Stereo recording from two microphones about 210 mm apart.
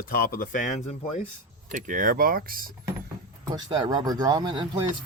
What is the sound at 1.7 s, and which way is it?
Speech, 40° right (ahead or behind).